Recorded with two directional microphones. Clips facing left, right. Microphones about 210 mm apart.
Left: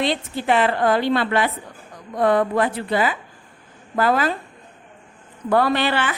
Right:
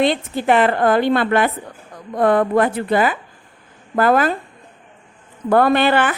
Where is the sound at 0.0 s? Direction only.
50° right (ahead or behind).